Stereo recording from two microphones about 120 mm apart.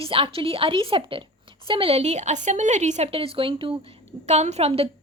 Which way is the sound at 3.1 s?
50° right (ahead or behind).